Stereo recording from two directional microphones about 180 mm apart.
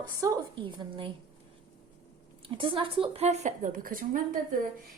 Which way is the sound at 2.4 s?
30° right (ahead or behind).